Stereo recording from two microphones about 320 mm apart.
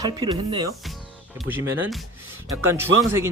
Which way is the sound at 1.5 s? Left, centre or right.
Centre.